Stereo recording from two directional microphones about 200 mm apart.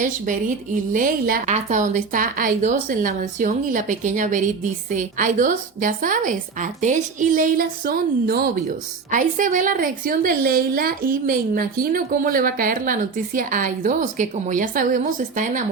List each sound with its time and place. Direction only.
0.0 s a woman's voice: 40° right (ahead or behind)